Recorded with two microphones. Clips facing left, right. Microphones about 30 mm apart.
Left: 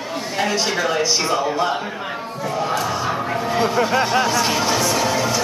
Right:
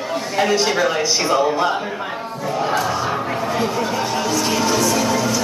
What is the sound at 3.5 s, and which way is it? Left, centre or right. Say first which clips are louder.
Speech: left 5 dB; centre.